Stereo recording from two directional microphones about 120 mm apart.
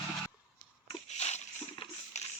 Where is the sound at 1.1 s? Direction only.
70° left (ahead or behind).